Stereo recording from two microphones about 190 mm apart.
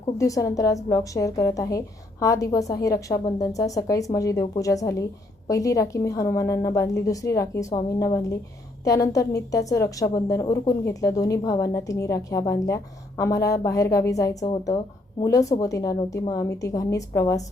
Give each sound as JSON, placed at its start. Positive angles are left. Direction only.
{"t": 0.2, "sound": "a woman's voice", "side_deg": 15}